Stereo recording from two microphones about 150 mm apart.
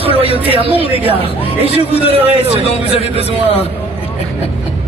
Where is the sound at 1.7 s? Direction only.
40° right (ahead or behind).